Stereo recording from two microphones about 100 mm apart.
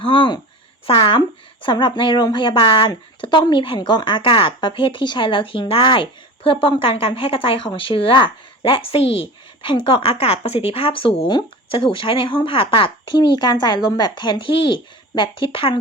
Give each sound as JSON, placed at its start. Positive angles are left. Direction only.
{"t": 0.0, "sound": "speech", "side_deg": 55}
{"t": 1.6, "sound": "speech", "side_deg": 50}
{"t": 3.8, "sound": "speech", "side_deg": 50}
{"t": 9.6, "sound": "speech", "side_deg": 60}